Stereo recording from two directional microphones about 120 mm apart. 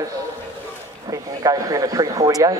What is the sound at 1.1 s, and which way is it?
Speech, 30° right (ahead or behind).